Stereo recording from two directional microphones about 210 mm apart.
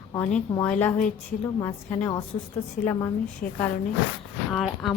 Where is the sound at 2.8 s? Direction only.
40° left (ahead or behind).